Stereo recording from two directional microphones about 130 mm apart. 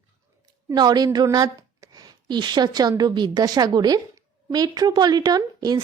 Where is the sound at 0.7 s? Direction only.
30° right (ahead or behind).